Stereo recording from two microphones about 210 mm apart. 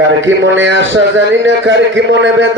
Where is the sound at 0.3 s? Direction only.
65° right (ahead or behind).